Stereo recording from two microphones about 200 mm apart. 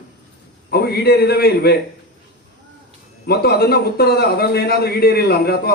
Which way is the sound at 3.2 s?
50° left (ahead or behind).